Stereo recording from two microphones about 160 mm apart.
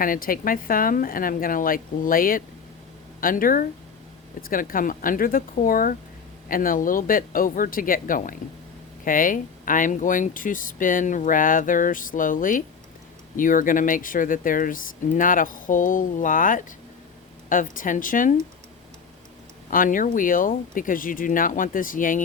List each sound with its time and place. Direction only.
0.0 s speech: 60° left (ahead or behind)
19.7 s speech: 55° left (ahead or behind)